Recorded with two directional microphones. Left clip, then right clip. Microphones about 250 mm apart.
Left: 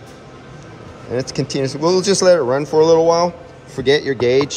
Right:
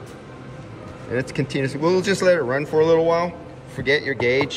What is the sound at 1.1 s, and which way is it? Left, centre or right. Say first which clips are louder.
Speech: left 3 dB; centre.